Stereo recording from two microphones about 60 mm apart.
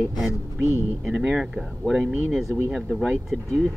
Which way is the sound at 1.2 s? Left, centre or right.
Centre.